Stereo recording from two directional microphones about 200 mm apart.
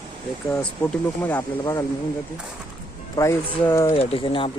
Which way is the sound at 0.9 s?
10° left (ahead or behind).